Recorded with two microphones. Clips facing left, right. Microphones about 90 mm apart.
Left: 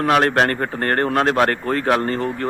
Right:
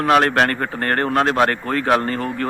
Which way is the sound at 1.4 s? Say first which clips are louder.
Left 1 dB; 35° left (ahead or behind).